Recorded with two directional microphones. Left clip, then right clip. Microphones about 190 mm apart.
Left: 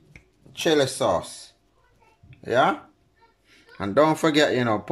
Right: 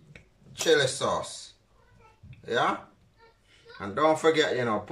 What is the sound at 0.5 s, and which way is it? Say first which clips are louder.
Speech: left 2 dB; 50° left (ahead or behind).